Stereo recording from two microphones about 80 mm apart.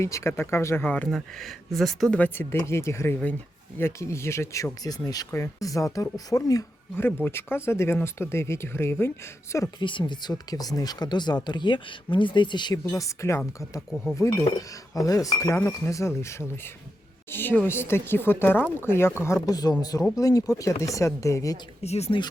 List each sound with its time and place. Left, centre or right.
0.0 s speech: left
1.1 s speech: centre
2.0 s speech: centre; by 6.7 s left
7.3 s speech: left
10.1 s speech: left
13.0 s speech: left
13.9 s speech: centre
14.2 s speech: left
19.5 s speech: left
22.1 s speech: left